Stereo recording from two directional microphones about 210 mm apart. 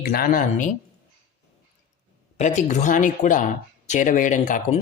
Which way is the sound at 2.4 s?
35° left (ahead or behind).